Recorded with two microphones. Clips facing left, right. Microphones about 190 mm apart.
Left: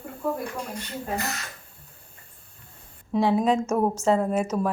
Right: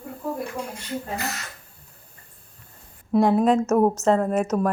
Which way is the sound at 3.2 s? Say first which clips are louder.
Right 3 dB; centre (ahead or behind).